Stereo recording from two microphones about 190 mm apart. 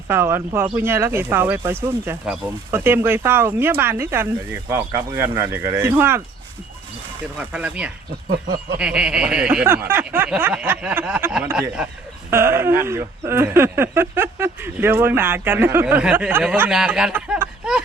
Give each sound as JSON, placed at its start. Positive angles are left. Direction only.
{"t": 0.1, "sound": "speech", "side_deg": -10}
{"t": 7.3, "sound": "speech", "side_deg": -5}
{"t": 8.3, "sound": "speech", "side_deg": -50}
{"t": 8.8, "sound": "speech", "side_deg": -5}